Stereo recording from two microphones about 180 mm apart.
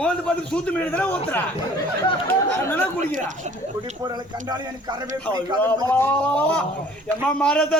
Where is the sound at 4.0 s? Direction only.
20° right (ahead or behind).